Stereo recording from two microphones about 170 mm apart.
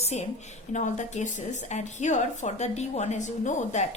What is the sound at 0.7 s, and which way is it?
A woman's voice, 45° left (ahead or behind).